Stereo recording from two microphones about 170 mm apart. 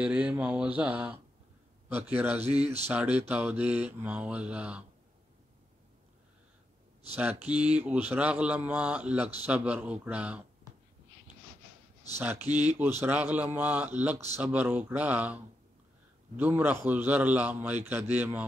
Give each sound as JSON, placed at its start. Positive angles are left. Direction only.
{"t": 0.0, "sound": "speech", "side_deg": -10}
{"t": 2.4, "sound": "speech", "side_deg": -40}
{"t": 2.9, "sound": "speech", "side_deg": -10}
{"t": 7.5, "sound": "speech", "side_deg": -10}
{"t": 12.2, "sound": "speech", "side_deg": -15}
{"t": 12.4, "sound": "speech", "side_deg": -40}
{"t": 12.7, "sound": "speech", "side_deg": -10}